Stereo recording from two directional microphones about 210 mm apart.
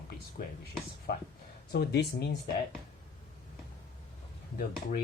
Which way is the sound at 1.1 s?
50° left (ahead or behind).